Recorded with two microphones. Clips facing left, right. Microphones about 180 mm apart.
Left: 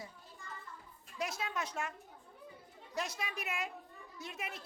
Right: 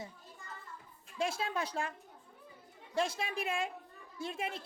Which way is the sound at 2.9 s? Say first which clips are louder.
Right 6 dB; 30° right (ahead or behind).